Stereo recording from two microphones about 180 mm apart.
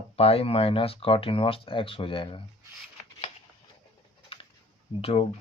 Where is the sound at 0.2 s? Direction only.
35° left (ahead or behind).